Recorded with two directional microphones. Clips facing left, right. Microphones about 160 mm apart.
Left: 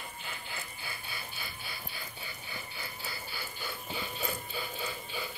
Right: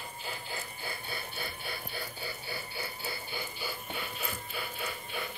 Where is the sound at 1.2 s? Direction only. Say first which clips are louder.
Right 5 dB; 60° right (ahead or behind).